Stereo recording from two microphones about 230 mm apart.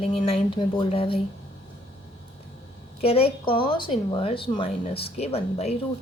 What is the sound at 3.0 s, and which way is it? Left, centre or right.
A woman's voice, left.